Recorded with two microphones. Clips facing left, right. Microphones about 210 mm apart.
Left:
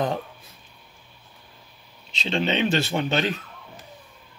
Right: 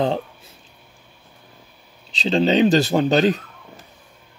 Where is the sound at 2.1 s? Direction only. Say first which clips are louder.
Right 7 dB; 35° right (ahead or behind).